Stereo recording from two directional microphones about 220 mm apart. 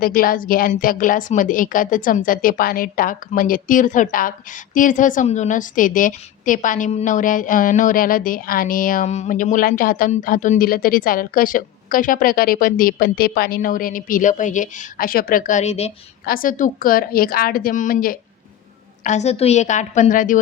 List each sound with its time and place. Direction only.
0.0 s a woman's voice: 40° left (ahead or behind)
16.2 s a woman's voice: 40° left (ahead or behind)